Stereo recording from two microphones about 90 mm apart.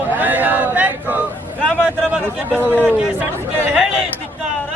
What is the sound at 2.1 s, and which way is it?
A man's voice, 20° right (ahead or behind).